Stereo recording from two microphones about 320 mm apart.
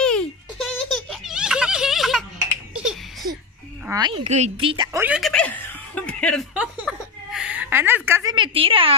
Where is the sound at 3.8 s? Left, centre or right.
Centre.